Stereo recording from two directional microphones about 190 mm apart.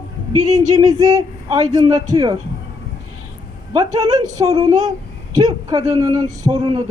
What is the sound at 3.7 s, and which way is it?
Speech, 20° right (ahead or behind).